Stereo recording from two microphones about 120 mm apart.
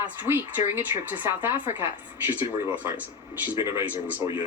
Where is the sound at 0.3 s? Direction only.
15° right (ahead or behind).